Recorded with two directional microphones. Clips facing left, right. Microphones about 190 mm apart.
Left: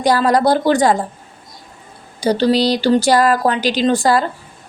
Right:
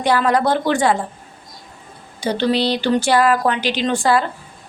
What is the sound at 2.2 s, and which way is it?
A woman's voice, 40° left (ahead or behind).